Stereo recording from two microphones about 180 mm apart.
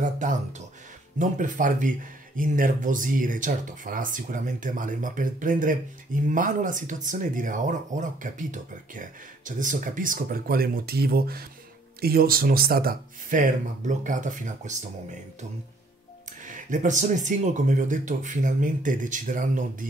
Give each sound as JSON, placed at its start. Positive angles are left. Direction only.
{"t": 0.0, "sound": "speech", "side_deg": -45}
{"t": 16.4, "sound": "speech", "side_deg": -45}